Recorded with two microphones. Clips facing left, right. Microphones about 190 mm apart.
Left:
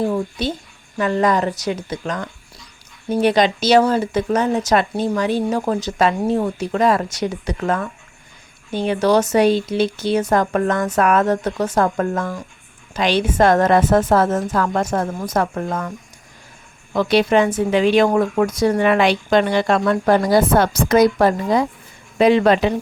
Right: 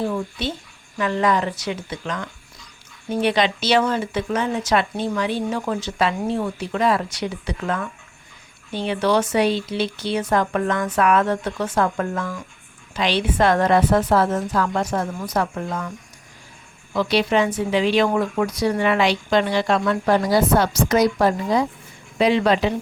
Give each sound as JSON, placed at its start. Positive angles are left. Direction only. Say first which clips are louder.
{"t": 0.1, "sound": "speech", "louder": "left 4 dB", "side_deg": 40}
{"t": 16.9, "sound": "speech", "louder": "left 4 dB", "side_deg": 50}